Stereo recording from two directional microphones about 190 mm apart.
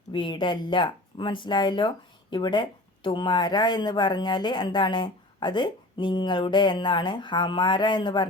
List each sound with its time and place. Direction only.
0.1 s speech: 25° left (ahead or behind)